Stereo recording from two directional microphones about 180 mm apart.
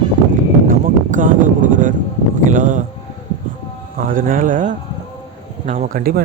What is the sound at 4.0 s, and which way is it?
A man's voice, 50° right (ahead or behind).